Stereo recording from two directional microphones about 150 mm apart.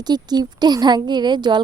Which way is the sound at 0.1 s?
30° right (ahead or behind).